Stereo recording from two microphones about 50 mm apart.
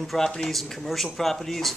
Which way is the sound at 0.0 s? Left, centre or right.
Centre.